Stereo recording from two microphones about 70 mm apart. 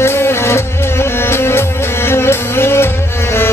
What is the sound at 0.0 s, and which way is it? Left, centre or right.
Music, left.